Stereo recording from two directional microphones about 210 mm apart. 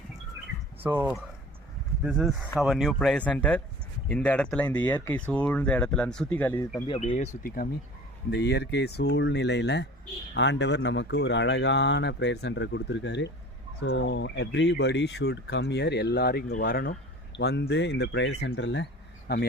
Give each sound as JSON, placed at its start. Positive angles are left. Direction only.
{"t": 0.8, "sound": "speech", "side_deg": -10}
{"t": 6.8, "sound": "speech", "side_deg": 25}